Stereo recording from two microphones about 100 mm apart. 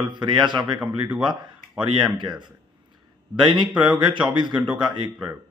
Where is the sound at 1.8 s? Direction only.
50° right (ahead or behind).